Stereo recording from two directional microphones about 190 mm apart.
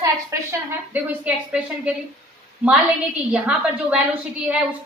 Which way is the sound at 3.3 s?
5° right (ahead or behind).